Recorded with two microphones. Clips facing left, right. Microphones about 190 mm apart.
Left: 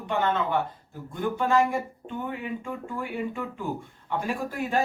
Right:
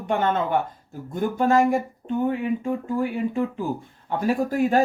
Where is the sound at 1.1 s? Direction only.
45° right (ahead or behind).